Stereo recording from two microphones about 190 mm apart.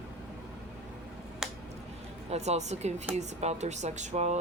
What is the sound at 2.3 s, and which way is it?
Speech, 35° right (ahead or behind).